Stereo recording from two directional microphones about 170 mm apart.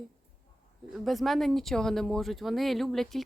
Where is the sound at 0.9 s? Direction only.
Centre (ahead or behind).